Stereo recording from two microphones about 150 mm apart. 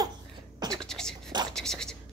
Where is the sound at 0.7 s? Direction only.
5° left (ahead or behind).